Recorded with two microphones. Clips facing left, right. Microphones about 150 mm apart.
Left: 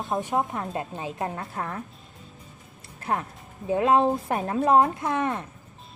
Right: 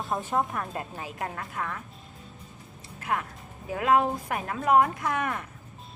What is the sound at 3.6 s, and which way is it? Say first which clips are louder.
A woman's voice: left 3 dB; 25° left (ahead or behind).